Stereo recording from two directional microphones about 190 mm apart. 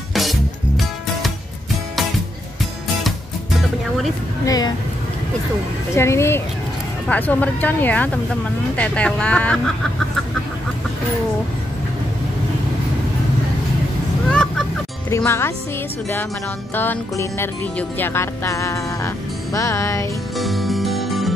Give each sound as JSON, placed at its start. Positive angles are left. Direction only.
{"t": 0.1, "sound": "music", "side_deg": 0}
{"t": 4.5, "sound": "speech", "side_deg": 20}
{"t": 5.9, "sound": "speech", "side_deg": 15}
{"t": 14.3, "sound": "music", "side_deg": 5}
{"t": 15.0, "sound": "speech", "side_deg": 15}
{"t": 16.7, "sound": "speech", "side_deg": 10}
{"t": 20.3, "sound": "music", "side_deg": 0}